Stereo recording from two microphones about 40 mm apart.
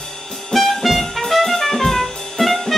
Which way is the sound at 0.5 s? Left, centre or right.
Centre.